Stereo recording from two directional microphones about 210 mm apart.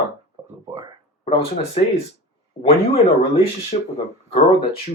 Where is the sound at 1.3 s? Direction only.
30° left (ahead or behind).